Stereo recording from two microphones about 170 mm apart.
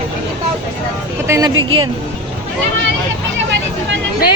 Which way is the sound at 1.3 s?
20° right (ahead or behind).